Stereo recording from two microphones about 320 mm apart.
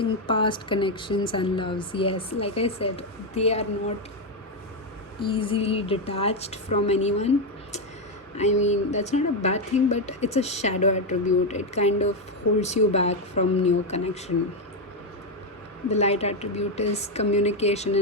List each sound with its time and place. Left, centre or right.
0.0 s speech: centre
5.2 s speech: centre
15.9 s speech: centre